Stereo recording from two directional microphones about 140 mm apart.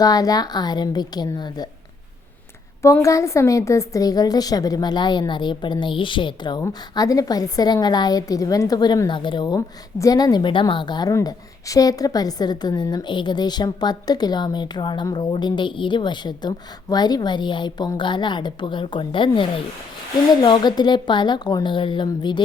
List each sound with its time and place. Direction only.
0.0 s a woman's voice: 25° left (ahead or behind)
2.8 s a woman's voice: 20° left (ahead or behind)
6.6 s a woman's voice: 25° left (ahead or behind)